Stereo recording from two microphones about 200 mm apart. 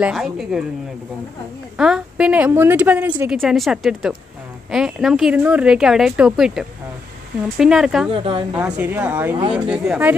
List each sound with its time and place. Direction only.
0.0 s a woman's voice: centre (ahead or behind)
1.8 s a woman's voice: 5° right (ahead or behind)
8.2 s a woman's voice: 25° right (ahead or behind)
8.5 s a woman's voice: 5° right (ahead or behind)